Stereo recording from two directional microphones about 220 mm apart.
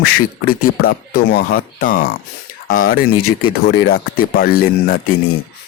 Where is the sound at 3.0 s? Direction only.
80° left.